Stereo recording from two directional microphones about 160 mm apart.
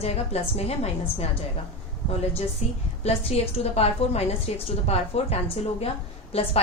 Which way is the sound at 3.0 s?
40° left (ahead or behind).